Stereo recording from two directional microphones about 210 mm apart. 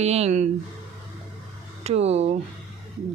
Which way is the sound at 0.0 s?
30° right (ahead or behind).